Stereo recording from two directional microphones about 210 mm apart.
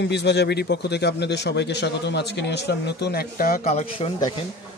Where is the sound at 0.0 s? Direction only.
55° left (ahead or behind); by 4.1 s 30° left (ahead or behind).